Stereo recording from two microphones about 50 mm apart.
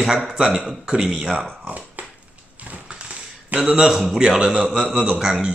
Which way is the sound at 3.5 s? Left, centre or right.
Centre.